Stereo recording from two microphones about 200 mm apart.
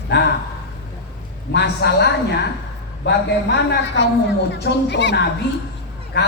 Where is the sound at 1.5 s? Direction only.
55° left (ahead or behind).